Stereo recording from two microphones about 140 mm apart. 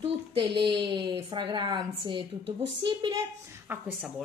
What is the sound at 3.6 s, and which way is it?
Speech, 15° right (ahead or behind).